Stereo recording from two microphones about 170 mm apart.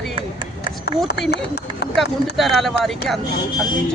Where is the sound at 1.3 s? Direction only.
75° left (ahead or behind).